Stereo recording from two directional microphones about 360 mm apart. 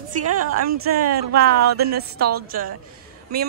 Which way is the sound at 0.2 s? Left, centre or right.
Right.